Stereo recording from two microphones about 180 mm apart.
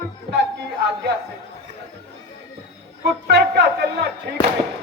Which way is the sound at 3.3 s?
70° right (ahead or behind).